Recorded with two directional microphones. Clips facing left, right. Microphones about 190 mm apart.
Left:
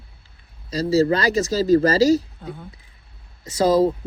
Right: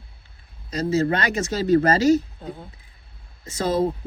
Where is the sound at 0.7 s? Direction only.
35° left (ahead or behind).